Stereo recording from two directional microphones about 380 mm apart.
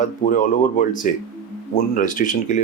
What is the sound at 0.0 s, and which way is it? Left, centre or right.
Speech, left.